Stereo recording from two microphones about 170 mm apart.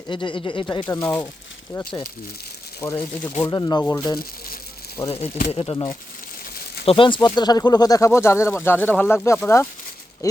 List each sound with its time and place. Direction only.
0.1 s speech: 30° left (ahead or behind)
2.8 s speech: 10° left (ahead or behind)
3.4 s speech: 20° left (ahead or behind)
5.5 s speech: 30° left (ahead or behind); by 9.4 s 15° left (ahead or behind)